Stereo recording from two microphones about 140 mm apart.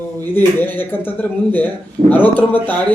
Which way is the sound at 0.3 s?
15° left (ahead or behind).